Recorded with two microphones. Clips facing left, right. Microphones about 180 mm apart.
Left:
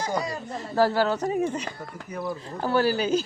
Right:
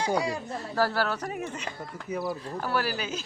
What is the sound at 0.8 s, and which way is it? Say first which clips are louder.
Speech: left 5 dB; 20° left (ahead or behind).